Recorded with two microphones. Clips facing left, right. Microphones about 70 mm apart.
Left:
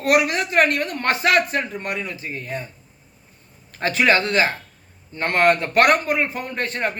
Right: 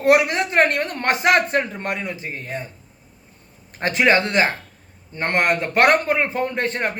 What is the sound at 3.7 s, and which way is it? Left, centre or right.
A woman's voice, right.